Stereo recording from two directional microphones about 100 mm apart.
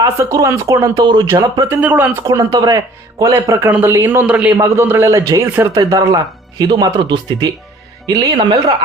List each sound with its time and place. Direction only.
0.0 s speech: 35° right (ahead or behind)
1.6 s speech: 20° right (ahead or behind)
2.4 s speech: 45° right (ahead or behind); by 3.7 s 30° right (ahead or behind)
3.7 s a man's voice: 15° right (ahead or behind)
4.3 s a man's voice: 10° right (ahead or behind)
4.5 s speech: 30° right (ahead or behind)